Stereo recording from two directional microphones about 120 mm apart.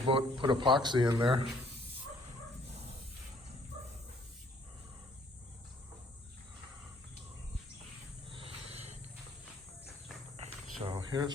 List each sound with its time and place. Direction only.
0.1 s speech: 45° right (ahead or behind)
8.3 s wild animals: 50° right (ahead or behind)
10.3 s insect: 60° right (ahead or behind)
10.9 s cricket: 35° right (ahead or behind)